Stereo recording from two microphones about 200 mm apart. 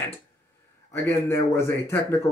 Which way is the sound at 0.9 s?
10° left (ahead or behind).